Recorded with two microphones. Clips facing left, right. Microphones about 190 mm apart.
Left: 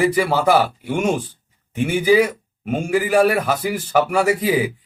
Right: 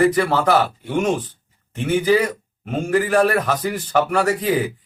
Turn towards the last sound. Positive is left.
turn(degrees=10)  # may be behind; listen again after turning